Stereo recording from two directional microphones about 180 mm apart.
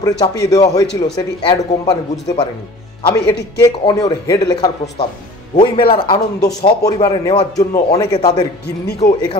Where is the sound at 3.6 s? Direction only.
20° left (ahead or behind).